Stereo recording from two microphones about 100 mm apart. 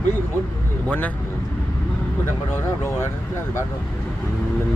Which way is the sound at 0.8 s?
15° left (ahead or behind).